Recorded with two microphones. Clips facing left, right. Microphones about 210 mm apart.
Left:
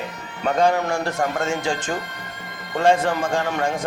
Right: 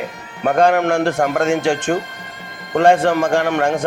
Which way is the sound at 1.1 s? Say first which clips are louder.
Right 6 dB; 65° right (ahead or behind).